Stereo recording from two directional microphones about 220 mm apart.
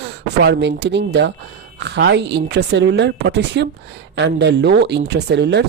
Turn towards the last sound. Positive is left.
turn(degrees=-50)  # may be behind; listen again after turning